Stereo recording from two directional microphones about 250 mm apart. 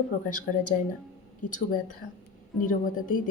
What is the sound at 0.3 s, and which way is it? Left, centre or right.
A woman's voice, left.